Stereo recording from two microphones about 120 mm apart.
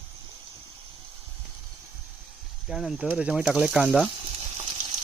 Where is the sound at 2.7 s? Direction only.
5° right (ahead or behind).